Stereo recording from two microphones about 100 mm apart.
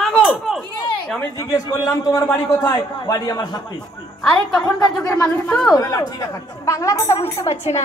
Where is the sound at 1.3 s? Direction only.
35° left (ahead or behind).